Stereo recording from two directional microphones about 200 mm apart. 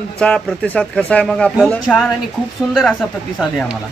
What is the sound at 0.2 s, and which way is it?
A man's voice, 5° left (ahead or behind).